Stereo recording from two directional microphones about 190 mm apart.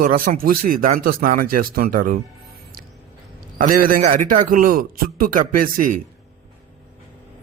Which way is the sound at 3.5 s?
45° right (ahead or behind).